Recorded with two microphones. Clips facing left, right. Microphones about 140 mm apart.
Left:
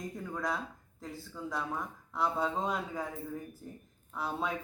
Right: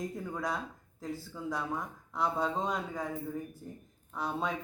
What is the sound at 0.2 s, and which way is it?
Speech, centre (ahead or behind).